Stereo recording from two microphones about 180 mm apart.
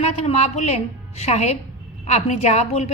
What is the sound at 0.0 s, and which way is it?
A woman's voice, 35° left (ahead or behind).